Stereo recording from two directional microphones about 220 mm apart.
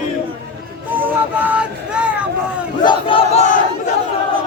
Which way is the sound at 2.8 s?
25° left (ahead or behind).